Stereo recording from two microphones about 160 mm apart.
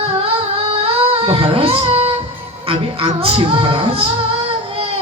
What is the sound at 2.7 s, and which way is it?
Speech, 35° right (ahead or behind).